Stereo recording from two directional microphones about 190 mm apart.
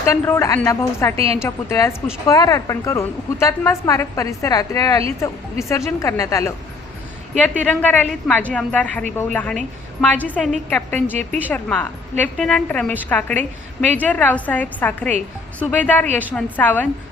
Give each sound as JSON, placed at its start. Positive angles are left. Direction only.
{"t": 0.0, "sound": "a woman's voice", "side_deg": 15}
{"t": 1.1, "sound": "a woman's voice", "side_deg": -30}
{"t": 1.4, "sound": "a woman's voice", "side_deg": 15}
{"t": 7.6, "sound": "a woman's voice", "side_deg": 10}